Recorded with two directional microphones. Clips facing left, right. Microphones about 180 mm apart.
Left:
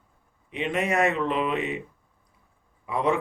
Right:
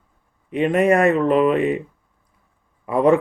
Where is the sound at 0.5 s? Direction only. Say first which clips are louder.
Right 9 dB; 50° right (ahead or behind).